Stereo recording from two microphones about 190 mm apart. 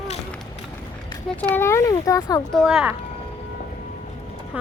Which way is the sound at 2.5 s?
Centre (ahead or behind).